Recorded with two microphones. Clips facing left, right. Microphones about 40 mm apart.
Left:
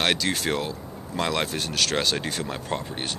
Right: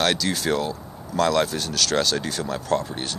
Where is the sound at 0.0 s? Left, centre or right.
Left.